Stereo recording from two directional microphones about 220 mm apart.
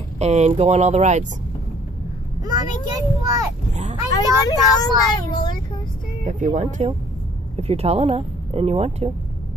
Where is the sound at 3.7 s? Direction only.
30° right (ahead or behind).